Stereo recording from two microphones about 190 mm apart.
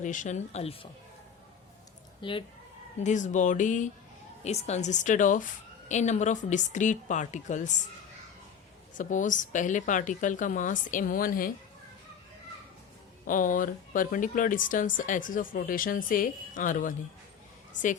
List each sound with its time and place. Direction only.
0.0 s a woman's voice: 40° left (ahead or behind)
2.2 s speech: 25° left (ahead or behind)
3.0 s a woman's voice: 40° left (ahead or behind)
9.0 s speech: 40° left (ahead or behind)
13.2 s speech: 45° left (ahead or behind)